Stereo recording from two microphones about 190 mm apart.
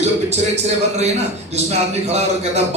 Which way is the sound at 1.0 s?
35° right (ahead or behind).